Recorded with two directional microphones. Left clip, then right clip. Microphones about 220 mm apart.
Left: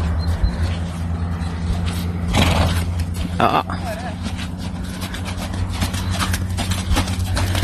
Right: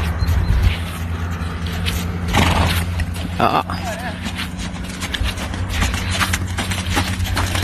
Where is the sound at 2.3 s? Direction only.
25° left (ahead or behind).